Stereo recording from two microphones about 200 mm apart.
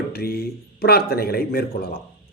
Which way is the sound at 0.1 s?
50° left (ahead or behind).